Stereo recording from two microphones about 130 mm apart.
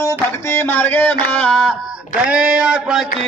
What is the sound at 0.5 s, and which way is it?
Music, 15° left (ahead or behind).